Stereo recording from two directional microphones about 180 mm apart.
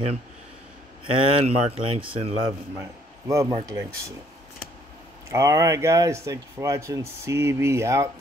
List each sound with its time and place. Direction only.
1.0 s speech: 30° right (ahead or behind)
3.3 s speech: 15° right (ahead or behind)
5.3 s speech: 15° right (ahead or behind)